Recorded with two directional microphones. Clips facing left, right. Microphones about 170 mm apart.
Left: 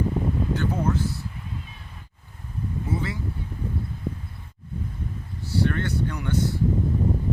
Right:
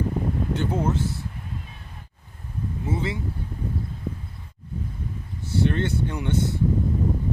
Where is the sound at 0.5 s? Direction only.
25° right (ahead or behind).